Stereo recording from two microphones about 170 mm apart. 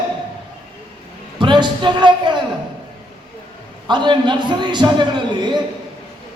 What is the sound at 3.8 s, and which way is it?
A man's voice, 25° right (ahead or behind).